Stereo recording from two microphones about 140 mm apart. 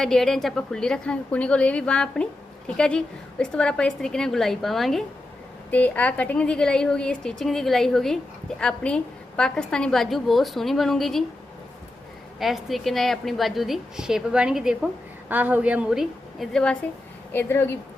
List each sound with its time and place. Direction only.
0.0 s a woman's voice: 5° left (ahead or behind)
12.4 s a woman's voice: centre (ahead or behind)
17.3 s a woman's voice: 15° left (ahead or behind)